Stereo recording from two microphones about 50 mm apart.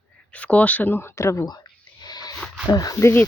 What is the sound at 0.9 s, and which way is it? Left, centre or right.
Speech, left.